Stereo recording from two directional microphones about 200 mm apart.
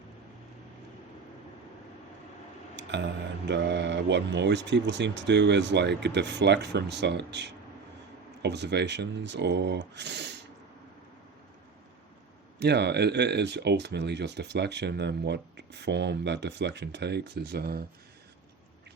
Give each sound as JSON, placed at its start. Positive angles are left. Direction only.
{"t": 2.7, "sound": "a sound", "side_deg": -60}
{"t": 3.5, "sound": "speech", "side_deg": -60}
{"t": 12.5, "sound": "speech", "side_deg": -55}